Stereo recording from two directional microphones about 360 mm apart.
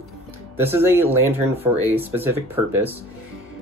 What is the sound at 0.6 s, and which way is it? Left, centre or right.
Speech, centre.